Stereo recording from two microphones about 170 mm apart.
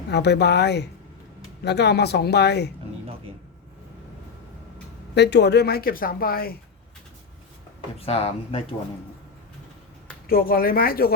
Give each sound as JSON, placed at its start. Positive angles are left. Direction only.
{"t": 0.1, "sound": "speech", "side_deg": 85}
{"t": 5.1, "sound": "speech", "side_deg": 80}
{"t": 7.9, "sound": "speech", "side_deg": 35}
{"t": 10.2, "sound": "speech", "side_deg": 60}